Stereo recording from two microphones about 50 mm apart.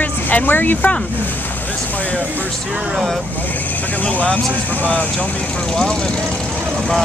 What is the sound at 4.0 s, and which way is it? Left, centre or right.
Speech, left.